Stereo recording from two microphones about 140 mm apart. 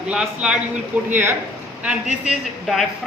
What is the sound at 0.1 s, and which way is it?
Speech, 5° right (ahead or behind).